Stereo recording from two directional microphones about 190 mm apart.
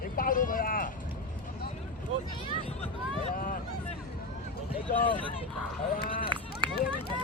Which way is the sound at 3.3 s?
45° left (ahead or behind).